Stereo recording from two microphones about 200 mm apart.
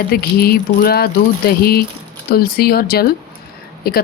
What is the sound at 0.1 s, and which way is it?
Speech, 50° left (ahead or behind).